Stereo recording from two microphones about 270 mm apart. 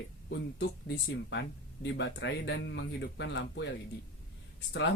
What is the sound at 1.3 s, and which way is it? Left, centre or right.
Speech, left.